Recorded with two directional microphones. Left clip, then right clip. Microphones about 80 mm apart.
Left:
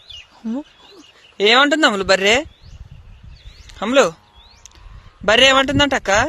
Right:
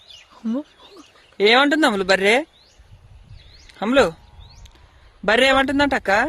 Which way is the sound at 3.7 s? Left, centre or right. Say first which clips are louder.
Left 2 dB; right.